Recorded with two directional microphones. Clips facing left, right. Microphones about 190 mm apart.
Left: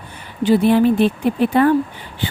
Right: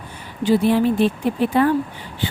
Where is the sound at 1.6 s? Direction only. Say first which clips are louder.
Left 3 dB; 60° left (ahead or behind).